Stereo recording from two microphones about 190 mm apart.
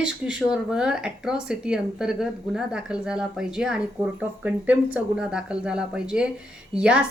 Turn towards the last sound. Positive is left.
turn(degrees=-5)  # may be behind; listen again after turning